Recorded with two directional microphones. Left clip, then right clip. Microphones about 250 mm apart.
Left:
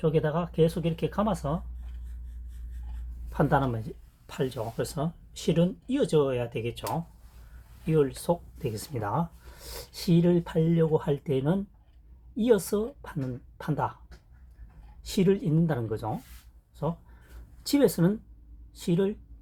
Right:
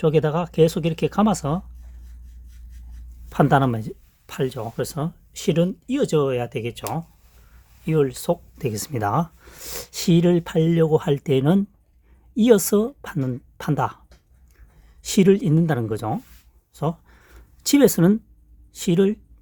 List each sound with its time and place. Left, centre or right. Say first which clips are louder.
0.0 s speech: right 7 dB; right
3.2 s speech: right 8 dB; right
15.0 s speech: right 8 dB; right
17.6 s speech: right 7 dB; right